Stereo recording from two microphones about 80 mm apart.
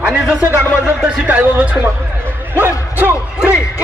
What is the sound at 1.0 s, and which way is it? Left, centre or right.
Speech, centre.